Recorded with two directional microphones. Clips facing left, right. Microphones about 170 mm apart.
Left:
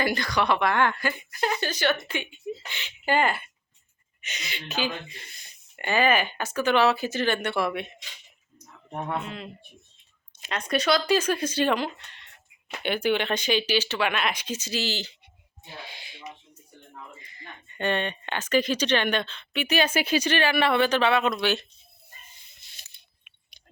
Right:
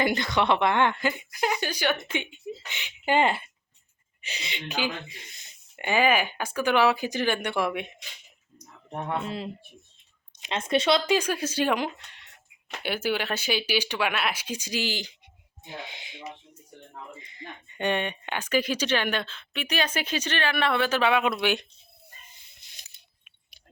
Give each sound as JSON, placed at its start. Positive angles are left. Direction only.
{"t": 0.0, "sound": "speech", "side_deg": -20}
{"t": 9.2, "sound": "speech", "side_deg": -35}